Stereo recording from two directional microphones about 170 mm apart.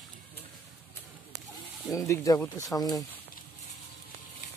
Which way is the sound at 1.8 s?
15° left (ahead or behind).